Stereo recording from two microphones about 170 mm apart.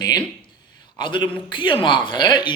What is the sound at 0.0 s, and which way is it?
A man's voice, 25° left (ahead or behind).